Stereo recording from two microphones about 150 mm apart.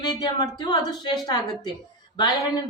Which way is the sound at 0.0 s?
25° left (ahead or behind).